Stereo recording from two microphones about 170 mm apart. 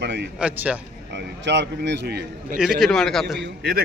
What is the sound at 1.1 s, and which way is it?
A man's voice, 90° right.